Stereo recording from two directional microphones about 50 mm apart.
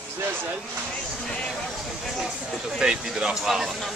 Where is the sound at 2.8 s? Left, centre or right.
Centre.